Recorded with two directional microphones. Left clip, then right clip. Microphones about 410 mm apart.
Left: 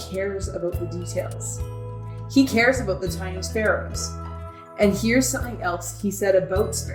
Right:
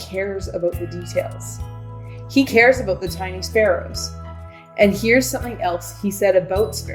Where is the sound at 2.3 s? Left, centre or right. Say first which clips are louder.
Right 5 dB; right.